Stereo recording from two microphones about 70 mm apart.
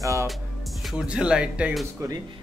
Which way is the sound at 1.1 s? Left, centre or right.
Centre.